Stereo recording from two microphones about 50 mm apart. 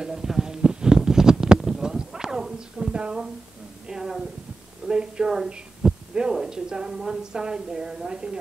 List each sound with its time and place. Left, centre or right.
0.0 s a sound: centre
4.8 s hum: centre
6.3 s a woman's voice: centre